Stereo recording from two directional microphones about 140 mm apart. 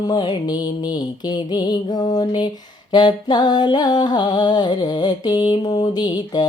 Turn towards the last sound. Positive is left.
turn(degrees=30)  # may be behind; listen again after turning